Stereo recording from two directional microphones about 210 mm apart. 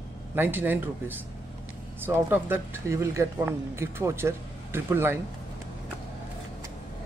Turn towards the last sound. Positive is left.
turn(degrees=-10)  # may be behind; listen again after turning